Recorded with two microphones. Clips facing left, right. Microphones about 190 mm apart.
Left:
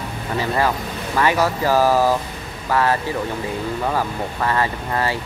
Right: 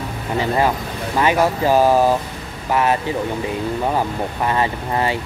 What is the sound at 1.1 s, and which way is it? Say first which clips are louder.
Speech: right 2 dB; 20° right (ahead or behind).